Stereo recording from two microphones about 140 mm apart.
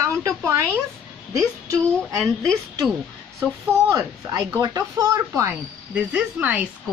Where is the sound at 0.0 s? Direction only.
20° right (ahead or behind).